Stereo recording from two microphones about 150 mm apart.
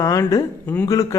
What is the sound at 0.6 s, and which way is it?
Speech, 10° left (ahead or behind).